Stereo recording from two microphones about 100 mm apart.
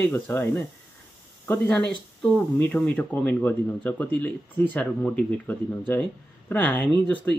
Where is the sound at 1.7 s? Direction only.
5° left (ahead or behind).